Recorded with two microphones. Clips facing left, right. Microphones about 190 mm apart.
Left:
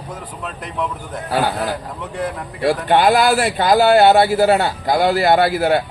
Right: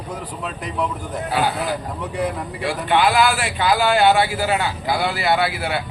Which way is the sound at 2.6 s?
40° left (ahead or behind).